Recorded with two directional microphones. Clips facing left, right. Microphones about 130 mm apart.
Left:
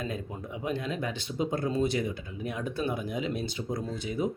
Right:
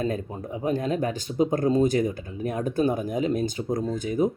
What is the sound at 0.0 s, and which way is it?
Speech, 40° right (ahead or behind).